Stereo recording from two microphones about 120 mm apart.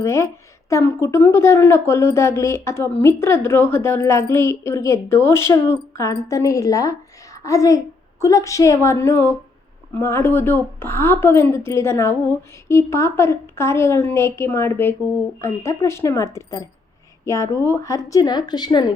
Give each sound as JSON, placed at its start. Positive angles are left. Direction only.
{"t": 0.0, "sound": "a woman's voice", "side_deg": 25}